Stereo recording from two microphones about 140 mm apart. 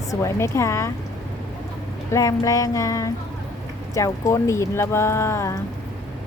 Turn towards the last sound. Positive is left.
turn(degrees=20)  # may be behind; listen again after turning